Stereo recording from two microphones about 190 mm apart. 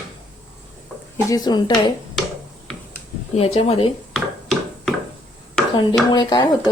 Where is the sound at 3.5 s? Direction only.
30° left (ahead or behind).